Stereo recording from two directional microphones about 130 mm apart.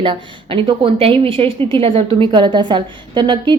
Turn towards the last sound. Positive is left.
turn(degrees=-35)  # may be behind; listen again after turning